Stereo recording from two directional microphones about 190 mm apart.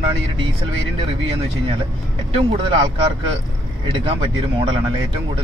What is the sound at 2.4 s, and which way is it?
Speech, 25° right (ahead or behind).